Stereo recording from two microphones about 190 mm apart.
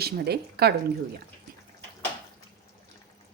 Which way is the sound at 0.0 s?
55° right (ahead or behind).